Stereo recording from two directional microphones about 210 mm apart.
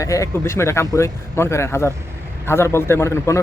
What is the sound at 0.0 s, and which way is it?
A man's voice, 15° left (ahead or behind).